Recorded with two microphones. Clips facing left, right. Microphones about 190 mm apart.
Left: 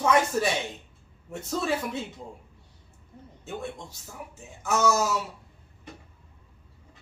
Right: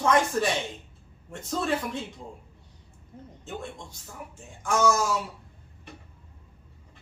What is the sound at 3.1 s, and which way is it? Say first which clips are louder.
Speech: right 3 dB; 20° right (ahead or behind).